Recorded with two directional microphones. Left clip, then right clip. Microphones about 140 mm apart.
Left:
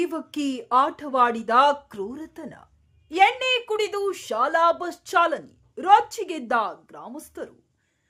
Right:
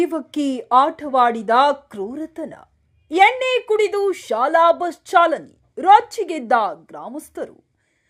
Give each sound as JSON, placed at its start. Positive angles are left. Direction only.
{"t": 0.0, "sound": "speech", "side_deg": -20}